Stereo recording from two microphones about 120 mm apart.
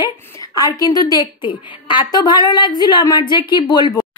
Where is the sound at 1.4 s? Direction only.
40° left (ahead or behind).